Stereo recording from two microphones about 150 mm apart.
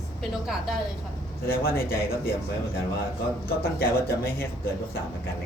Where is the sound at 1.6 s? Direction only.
90° left.